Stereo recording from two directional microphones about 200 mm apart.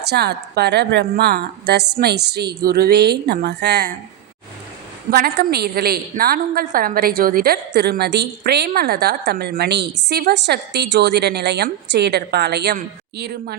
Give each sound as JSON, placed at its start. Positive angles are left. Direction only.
{"t": 0.1, "sound": "a woman's voice", "side_deg": -55}
{"t": 5.1, "sound": "a woman's voice", "side_deg": -50}